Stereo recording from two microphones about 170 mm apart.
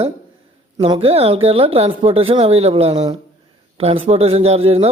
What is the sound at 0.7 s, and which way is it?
Speech, 30° right (ahead or behind).